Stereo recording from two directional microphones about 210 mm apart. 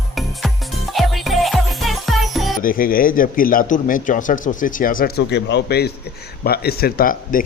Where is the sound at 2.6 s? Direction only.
40° left (ahead or behind).